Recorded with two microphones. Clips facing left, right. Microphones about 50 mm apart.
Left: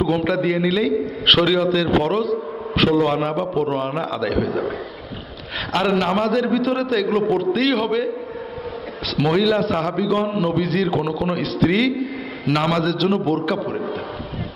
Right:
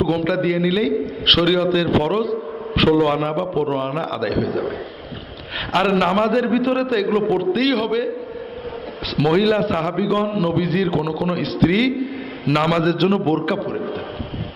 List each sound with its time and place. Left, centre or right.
0.0 s a man's voice: centre
2.7 s a sound: centre
3.2 s a man's voice: centre
6.0 s a man's voice: right
6.7 s a man's voice: centre
9.1 s a man's voice: centre
10.2 s a man's voice: centre
12.5 s a man's voice: centre
13.1 s a man's voice: centre